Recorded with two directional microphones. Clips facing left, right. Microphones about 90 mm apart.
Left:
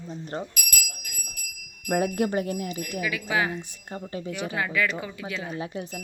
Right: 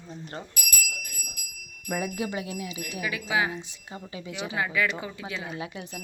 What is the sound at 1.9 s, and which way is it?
Speech, 60° left (ahead or behind).